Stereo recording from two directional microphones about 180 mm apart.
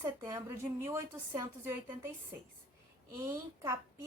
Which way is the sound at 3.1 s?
15° right (ahead or behind).